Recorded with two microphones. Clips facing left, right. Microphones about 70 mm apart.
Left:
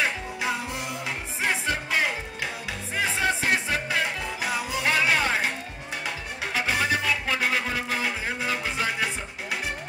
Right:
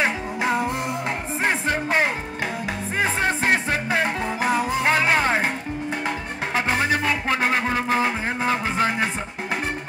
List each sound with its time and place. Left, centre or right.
0.0 s music: right